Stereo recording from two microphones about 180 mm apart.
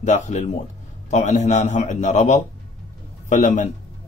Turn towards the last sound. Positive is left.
turn(degrees=45)  # may be behind; listen again after turning